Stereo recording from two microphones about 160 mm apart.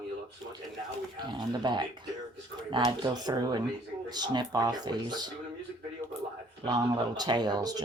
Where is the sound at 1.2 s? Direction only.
30° right (ahead or behind).